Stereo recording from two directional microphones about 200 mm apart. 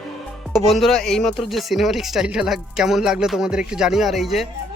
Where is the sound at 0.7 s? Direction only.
Centre (ahead or behind).